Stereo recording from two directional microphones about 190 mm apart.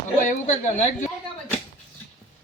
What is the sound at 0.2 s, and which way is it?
Speech, 40° left (ahead or behind).